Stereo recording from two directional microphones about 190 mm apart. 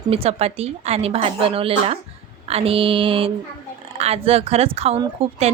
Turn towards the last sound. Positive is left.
turn(degrees=-30)  # may be behind; listen again after turning